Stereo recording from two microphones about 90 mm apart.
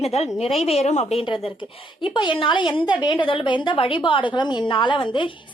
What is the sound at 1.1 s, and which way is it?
Speech, 80° left.